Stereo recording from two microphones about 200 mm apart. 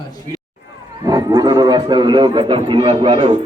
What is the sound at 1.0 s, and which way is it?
A man's voice, 20° right (ahead or behind).